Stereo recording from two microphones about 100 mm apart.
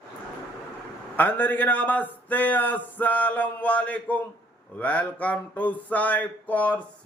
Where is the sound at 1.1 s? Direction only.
20° left (ahead or behind).